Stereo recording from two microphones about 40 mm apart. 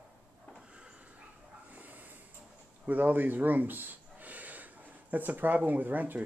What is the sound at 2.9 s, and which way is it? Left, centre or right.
Speech, right.